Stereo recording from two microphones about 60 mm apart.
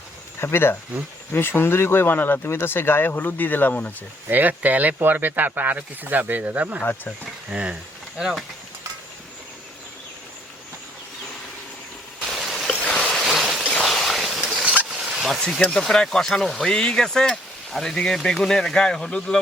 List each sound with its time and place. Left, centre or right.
0.3 s speech: left
4.3 s speech: right
7.5 s speech: centre
8.2 s speech: centre
12.2 s stream: centre
12.7 s a sound: centre
13.1 s a sound: centre
14.6 s a sound: centre
15.2 s speech: centre